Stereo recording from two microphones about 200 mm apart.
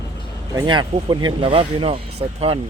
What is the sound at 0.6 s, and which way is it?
Speech, 25° right (ahead or behind).